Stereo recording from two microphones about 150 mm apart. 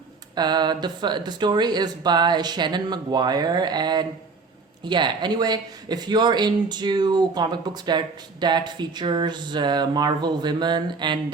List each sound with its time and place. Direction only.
0.3 s speech: 30° right (ahead or behind)